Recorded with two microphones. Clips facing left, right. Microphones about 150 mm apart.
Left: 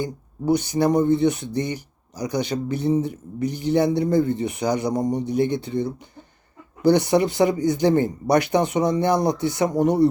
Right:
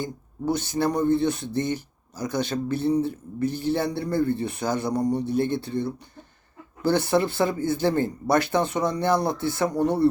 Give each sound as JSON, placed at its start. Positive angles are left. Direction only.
{"t": 0.0, "sound": "speech", "side_deg": 15}